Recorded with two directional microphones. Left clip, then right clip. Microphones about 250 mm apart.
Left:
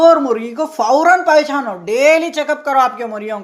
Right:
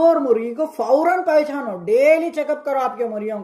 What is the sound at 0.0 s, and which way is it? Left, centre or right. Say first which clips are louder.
Speech: left 5 dB; centre.